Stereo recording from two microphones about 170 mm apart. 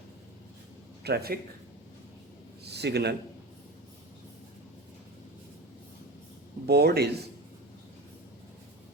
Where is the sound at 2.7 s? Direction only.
75° right (ahead or behind).